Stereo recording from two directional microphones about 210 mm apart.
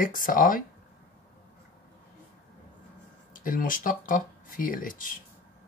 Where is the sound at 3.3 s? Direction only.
40° left (ahead or behind).